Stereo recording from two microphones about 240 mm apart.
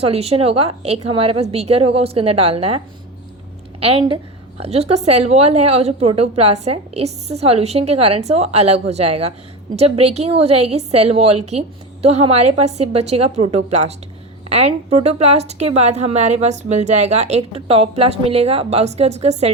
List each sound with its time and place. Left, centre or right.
0.0 s a woman's voice: right